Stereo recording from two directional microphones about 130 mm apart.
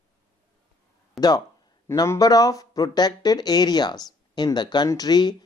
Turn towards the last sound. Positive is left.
turn(degrees=35)  # may be behind; listen again after turning